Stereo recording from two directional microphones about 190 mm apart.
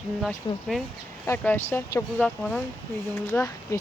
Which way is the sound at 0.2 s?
Centre (ahead or behind).